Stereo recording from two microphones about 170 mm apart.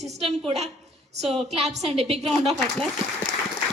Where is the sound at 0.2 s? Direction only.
40° right (ahead or behind).